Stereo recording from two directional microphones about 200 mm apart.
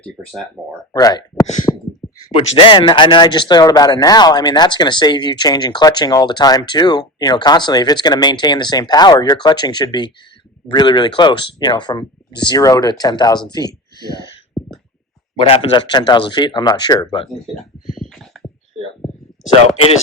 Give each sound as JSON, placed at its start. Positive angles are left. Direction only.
{"t": 0.0, "sound": "speech", "side_deg": 0}
{"t": 0.9, "sound": "speech", "side_deg": 20}
{"t": 14.6, "sound": "a sound", "side_deg": 0}
{"t": 15.4, "sound": "speech", "side_deg": 25}
{"t": 17.2, "sound": "speech", "side_deg": 0}